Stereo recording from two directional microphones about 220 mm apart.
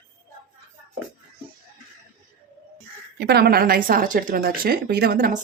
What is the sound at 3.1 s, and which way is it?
Speech, 45° right (ahead or behind).